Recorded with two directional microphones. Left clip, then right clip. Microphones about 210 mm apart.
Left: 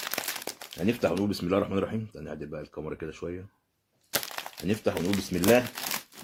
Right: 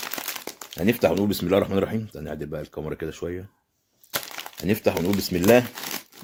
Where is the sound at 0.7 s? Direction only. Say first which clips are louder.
Right 6 dB; 35° right (ahead or behind).